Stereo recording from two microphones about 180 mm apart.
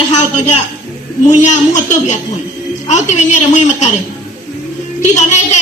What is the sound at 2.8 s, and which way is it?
A man's voice, 40° left (ahead or behind).